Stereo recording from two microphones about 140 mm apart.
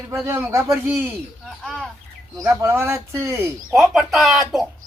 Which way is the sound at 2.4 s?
15° right (ahead or behind).